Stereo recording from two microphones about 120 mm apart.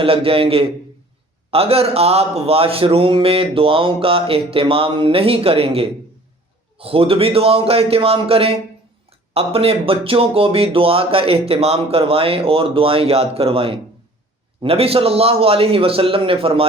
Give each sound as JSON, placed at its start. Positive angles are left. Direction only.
{"t": 0.0, "sound": "a man's voice", "side_deg": -50}